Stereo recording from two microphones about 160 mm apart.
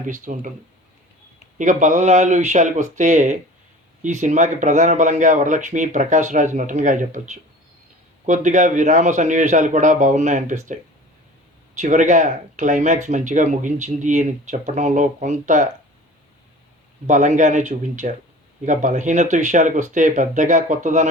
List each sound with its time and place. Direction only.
0.1 s speech: 55° right (ahead or behind)
1.5 s speech: 50° right (ahead or behind)
11.8 s speech: 50° right (ahead or behind)
17.1 s speech: 50° right (ahead or behind)